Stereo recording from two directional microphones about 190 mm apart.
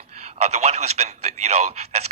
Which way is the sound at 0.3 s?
35° right (ahead or behind).